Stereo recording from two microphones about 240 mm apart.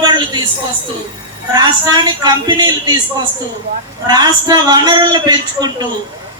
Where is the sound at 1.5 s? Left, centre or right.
Centre.